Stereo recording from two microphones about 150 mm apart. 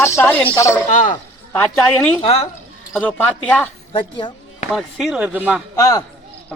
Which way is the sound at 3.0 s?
10° left (ahead or behind).